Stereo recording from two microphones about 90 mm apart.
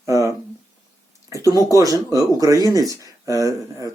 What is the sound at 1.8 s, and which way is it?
A man's voice, 40° right (ahead or behind).